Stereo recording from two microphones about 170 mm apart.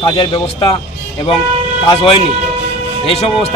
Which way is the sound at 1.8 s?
30° left (ahead or behind).